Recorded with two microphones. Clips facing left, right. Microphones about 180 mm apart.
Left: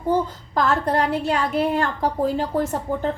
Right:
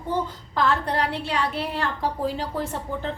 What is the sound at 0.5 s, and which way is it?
A woman's voice, 45° left (ahead or behind).